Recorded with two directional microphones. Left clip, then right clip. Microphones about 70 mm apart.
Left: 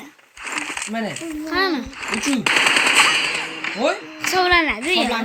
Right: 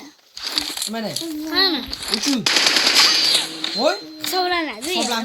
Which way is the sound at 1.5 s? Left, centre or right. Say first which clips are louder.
Right 2 dB; left.